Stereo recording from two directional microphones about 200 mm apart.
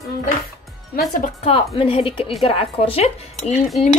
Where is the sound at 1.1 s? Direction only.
35° left (ahead or behind).